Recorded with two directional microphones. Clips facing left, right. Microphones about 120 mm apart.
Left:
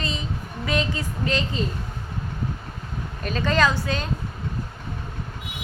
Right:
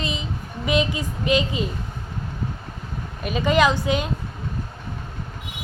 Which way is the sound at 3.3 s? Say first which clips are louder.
Right 3 dB; 10° right (ahead or behind).